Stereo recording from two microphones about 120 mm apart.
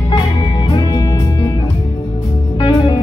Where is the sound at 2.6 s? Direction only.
40° left (ahead or behind).